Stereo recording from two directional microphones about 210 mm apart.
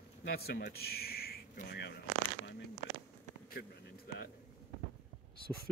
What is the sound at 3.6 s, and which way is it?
Speech, 50° left (ahead or behind).